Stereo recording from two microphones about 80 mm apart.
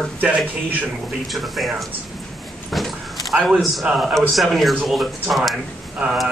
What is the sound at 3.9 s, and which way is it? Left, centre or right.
Speech, centre.